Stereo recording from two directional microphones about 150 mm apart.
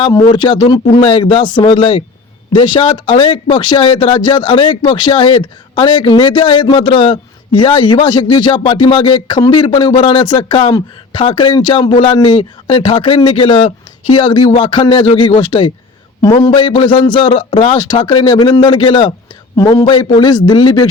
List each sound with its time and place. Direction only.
0.0 s speech: 30° left (ahead or behind)